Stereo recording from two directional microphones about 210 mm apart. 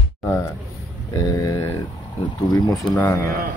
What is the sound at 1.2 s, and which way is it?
Speech, 15° left (ahead or behind).